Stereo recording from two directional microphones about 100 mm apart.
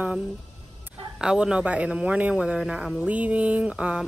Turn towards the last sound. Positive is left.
turn(degrees=-10)  # may be behind; listen again after turning